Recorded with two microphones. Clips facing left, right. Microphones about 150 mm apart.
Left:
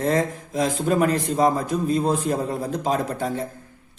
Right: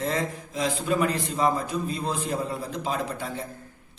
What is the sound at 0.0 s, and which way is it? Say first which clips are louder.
Speech: left 6 dB; 45° left (ahead or behind).